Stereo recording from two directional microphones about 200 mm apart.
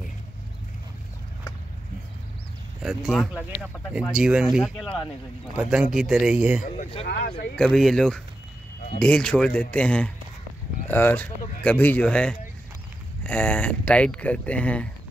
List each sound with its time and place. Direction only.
2.8 s speech: centre (ahead or behind)
4.8 s speech: 25° left (ahead or behind)
5.6 s speech: 5° right (ahead or behind)
7.1 s speech: 45° left (ahead or behind)
7.5 s speech: centre (ahead or behind)